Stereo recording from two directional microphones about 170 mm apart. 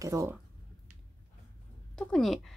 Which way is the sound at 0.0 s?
20° right (ahead or behind).